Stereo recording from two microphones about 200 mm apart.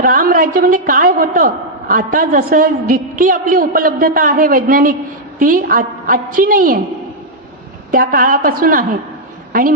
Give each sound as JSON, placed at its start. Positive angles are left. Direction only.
{"t": 0.0, "sound": "a man's voice", "side_deg": -45}
{"t": 7.9, "sound": "a man's voice", "side_deg": -45}